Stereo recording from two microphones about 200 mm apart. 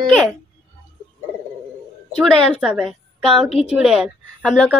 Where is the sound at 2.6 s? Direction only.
Centre (ahead or behind).